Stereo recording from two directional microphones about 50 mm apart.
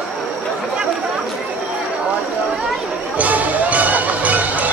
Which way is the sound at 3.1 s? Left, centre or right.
Right.